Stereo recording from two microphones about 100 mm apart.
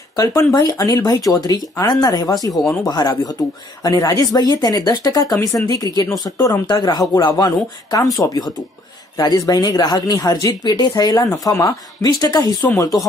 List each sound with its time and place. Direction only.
0.1 s speech: 35° left (ahead or behind)
9.2 s speech: 40° left (ahead or behind)